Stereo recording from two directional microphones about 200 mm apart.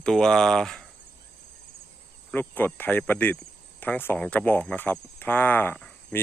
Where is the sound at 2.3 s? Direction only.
10° left (ahead or behind).